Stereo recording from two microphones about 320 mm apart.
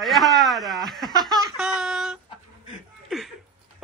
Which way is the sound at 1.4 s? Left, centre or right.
Centre.